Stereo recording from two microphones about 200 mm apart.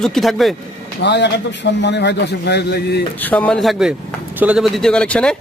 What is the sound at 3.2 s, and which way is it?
Speech, 10° left (ahead or behind).